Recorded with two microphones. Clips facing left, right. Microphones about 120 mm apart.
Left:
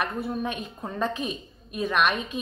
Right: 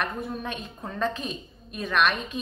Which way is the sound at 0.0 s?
10° left (ahead or behind).